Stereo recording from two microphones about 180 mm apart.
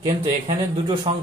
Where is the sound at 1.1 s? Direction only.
30° right (ahead or behind).